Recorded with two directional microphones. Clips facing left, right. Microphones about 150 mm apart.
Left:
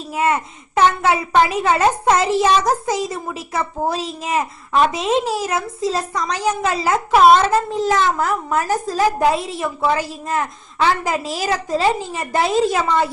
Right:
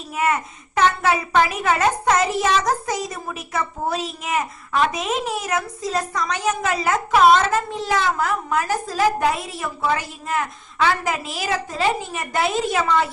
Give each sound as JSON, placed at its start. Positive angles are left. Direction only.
{"t": 0.1, "sound": "a child's voice", "side_deg": 30}
{"t": 9.4, "sound": "a child's voice", "side_deg": 25}